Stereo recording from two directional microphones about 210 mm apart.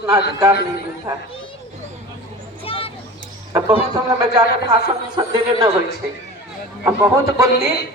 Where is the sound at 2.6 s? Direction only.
25° left (ahead or behind).